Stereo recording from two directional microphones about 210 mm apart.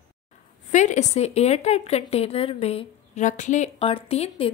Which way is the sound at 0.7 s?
35° left (ahead or behind).